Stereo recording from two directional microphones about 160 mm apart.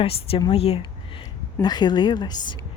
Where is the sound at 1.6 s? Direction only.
25° left (ahead or behind).